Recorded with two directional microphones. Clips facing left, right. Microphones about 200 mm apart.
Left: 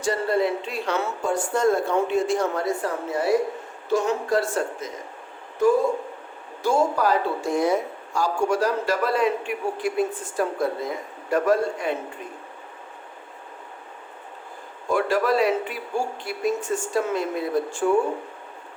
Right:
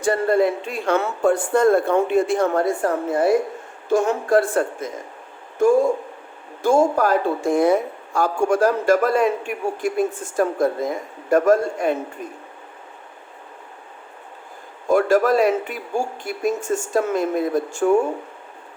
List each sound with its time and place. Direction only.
0.0 s speech: 50° right (ahead or behind)
14.8 s speech: 45° right (ahead or behind)